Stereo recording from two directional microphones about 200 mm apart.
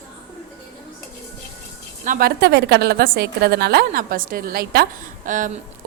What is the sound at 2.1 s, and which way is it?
A woman's voice, 50° right (ahead or behind).